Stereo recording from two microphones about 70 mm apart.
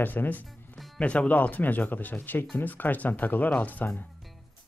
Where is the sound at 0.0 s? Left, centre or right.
Left.